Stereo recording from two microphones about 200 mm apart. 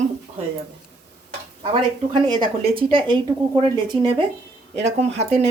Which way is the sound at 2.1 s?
20° right (ahead or behind).